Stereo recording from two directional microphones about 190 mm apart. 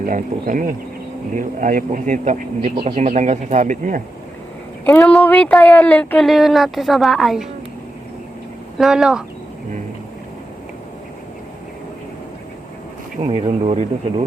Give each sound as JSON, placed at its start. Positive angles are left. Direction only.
{"t": 0.0, "sound": "a man's voice", "side_deg": -45}
{"t": 4.9, "sound": "speech", "side_deg": 10}
{"t": 8.8, "sound": "speech", "side_deg": 0}
{"t": 13.2, "sound": "a man's voice", "side_deg": -30}